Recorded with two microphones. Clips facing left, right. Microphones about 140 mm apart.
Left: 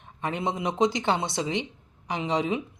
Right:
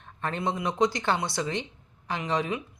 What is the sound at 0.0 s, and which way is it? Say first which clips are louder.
Speech: left 1 dB; 15° left (ahead or behind).